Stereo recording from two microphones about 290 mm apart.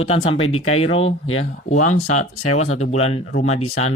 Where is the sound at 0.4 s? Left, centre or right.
Left.